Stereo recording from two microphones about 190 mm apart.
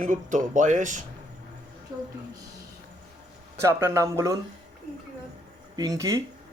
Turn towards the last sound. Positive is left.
turn(degrees=-15)  # may be behind; listen again after turning